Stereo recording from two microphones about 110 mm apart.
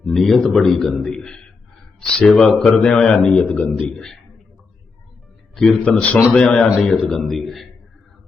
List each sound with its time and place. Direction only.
0.0 s a man's voice: 5° left (ahead or behind)
5.5 s a man's voice: 5° left (ahead or behind)